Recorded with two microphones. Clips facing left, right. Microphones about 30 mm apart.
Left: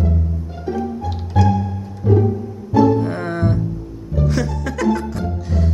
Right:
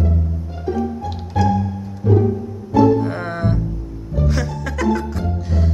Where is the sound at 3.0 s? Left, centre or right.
Centre.